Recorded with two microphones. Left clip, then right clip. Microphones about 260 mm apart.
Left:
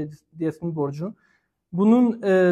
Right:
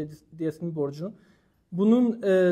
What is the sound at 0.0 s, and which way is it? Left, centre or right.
Speech, right.